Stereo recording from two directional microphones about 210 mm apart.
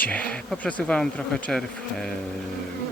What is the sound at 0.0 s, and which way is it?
Speech, 5° left (ahead or behind).